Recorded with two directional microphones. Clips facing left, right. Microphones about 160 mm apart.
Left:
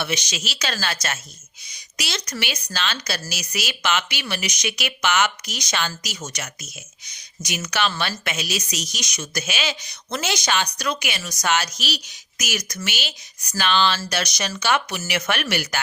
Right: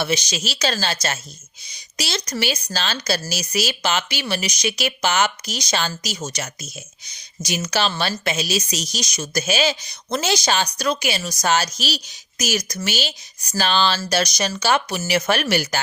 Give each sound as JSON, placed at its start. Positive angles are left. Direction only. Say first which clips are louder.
{"t": 0.0, "sound": "a woman's voice", "louder": "right 4 dB", "side_deg": -35}